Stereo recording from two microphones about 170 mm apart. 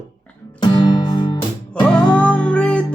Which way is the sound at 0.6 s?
25° left (ahead or behind).